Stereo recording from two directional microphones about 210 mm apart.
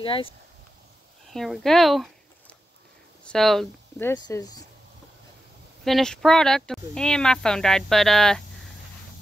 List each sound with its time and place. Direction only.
0.0 s speech: 25° left (ahead or behind)
1.3 s speech: centre (ahead or behind)
3.3 s speech: centre (ahead or behind); by 4.6 s 15° left (ahead or behind)
5.9 s speech: centre (ahead or behind)